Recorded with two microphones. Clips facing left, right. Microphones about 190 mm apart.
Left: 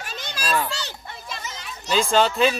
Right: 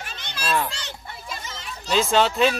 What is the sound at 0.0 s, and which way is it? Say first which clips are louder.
Children playing: left 3 dB; 40° left (ahead or behind).